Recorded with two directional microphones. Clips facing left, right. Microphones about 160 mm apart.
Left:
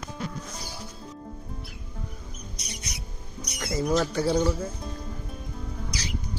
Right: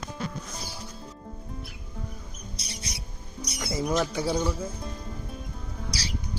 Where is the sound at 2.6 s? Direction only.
30° right (ahead or behind).